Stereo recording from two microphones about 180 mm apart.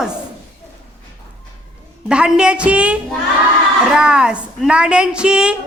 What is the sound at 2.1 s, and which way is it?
Speech, 5° right (ahead or behind).